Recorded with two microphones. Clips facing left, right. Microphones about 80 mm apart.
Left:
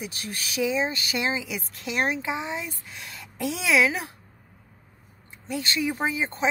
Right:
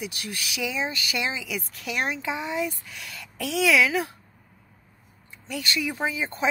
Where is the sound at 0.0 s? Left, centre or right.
Left.